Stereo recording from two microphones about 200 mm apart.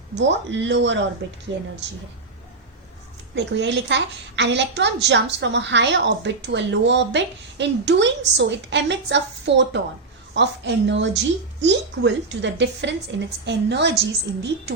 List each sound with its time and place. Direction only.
0.2 s a woman's voice: 60° right (ahead or behind)
3.3 s a woman's voice: 60° right (ahead or behind)